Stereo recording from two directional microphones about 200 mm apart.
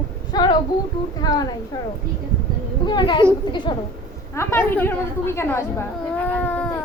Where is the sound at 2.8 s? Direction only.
20° left (ahead or behind).